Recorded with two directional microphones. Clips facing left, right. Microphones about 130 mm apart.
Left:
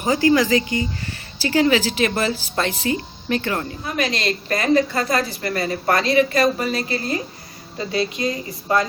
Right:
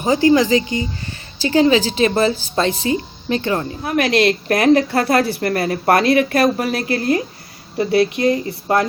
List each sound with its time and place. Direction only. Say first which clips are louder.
0.0 s a woman's voice: right 3 dB; 25° right (ahead or behind)
3.8 s a woman's voice: right 8 dB; 60° right (ahead or behind)